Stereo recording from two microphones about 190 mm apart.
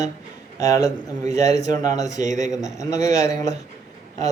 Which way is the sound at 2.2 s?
40° right (ahead or behind).